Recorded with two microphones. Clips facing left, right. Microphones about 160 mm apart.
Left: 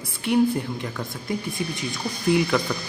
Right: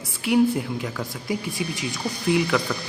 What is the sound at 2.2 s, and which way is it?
Speech, centre (ahead or behind).